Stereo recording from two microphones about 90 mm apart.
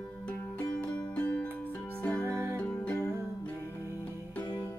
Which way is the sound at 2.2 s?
30° right (ahead or behind).